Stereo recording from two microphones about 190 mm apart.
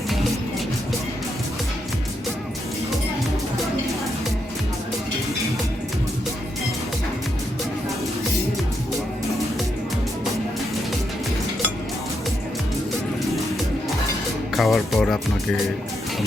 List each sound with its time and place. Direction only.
14.5 s music: centre (ahead or behind)